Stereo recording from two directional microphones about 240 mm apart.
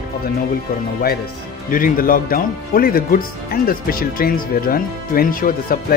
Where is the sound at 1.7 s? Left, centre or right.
Left.